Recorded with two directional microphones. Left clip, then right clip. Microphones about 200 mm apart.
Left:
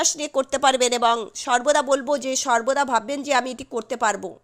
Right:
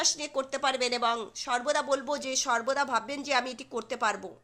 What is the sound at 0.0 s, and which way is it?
A woman's voice, 40° left (ahead or behind).